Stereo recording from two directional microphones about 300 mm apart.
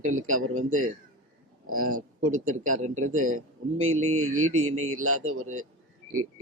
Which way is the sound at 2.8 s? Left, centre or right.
Right.